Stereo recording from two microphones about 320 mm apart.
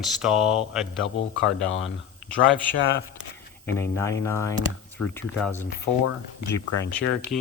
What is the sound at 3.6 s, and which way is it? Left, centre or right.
Speech, centre.